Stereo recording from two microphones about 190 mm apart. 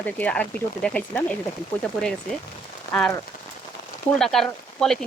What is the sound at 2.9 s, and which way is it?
Speech, 5° left (ahead or behind).